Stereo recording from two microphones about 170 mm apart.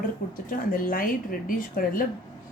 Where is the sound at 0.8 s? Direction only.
55° left (ahead or behind).